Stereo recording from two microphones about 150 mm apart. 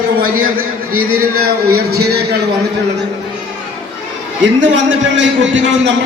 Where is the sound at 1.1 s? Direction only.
90° right.